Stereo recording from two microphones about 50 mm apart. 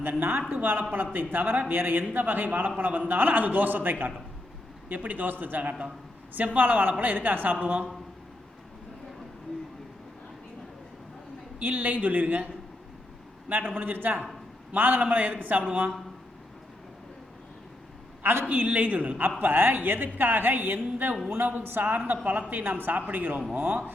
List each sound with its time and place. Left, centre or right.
0.0 s speech: right
11.6 s speech: right
13.5 s speech: right
18.2 s a sound: right
18.4 s speech: right